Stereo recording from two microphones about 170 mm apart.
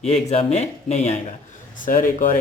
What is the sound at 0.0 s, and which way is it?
Speech, 40° left (ahead or behind).